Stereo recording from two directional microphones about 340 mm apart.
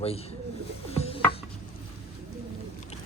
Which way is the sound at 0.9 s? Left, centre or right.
Centre.